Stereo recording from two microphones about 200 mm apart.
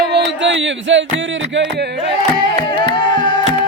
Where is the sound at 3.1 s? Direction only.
40° right (ahead or behind).